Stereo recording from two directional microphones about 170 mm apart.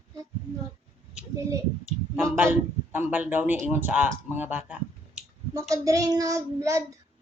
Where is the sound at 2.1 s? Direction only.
15° right (ahead or behind).